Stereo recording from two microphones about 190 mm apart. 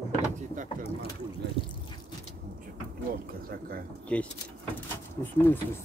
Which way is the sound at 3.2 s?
50° right (ahead or behind).